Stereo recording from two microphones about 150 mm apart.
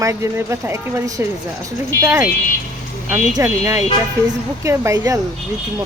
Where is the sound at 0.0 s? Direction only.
20° right (ahead or behind).